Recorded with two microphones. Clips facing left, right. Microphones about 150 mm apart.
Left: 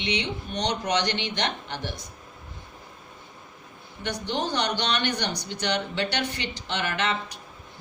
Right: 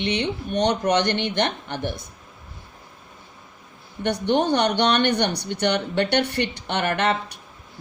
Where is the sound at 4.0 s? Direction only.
60° right (ahead or behind).